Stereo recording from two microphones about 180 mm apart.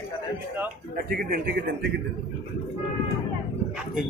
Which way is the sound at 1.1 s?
55° right (ahead or behind).